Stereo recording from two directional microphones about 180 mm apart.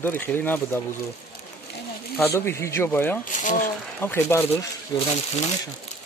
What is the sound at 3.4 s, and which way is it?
Speech, 45° left (ahead or behind).